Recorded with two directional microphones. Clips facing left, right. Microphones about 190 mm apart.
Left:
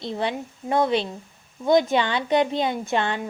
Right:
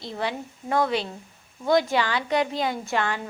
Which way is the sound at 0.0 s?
20° left (ahead or behind).